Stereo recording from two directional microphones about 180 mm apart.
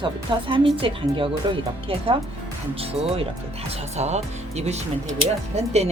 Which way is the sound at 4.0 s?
40° right (ahead or behind).